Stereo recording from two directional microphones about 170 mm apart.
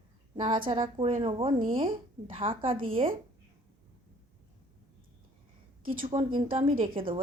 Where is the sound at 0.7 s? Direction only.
30° right (ahead or behind).